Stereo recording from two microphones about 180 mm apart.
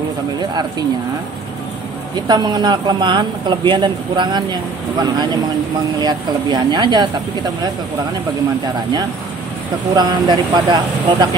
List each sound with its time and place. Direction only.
2.2 s speech: 25° right (ahead or behind)
9.9 s speech: 25° right (ahead or behind)